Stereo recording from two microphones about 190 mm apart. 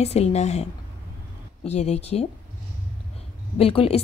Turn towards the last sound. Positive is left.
turn(degrees=30)  # may be behind; listen again after turning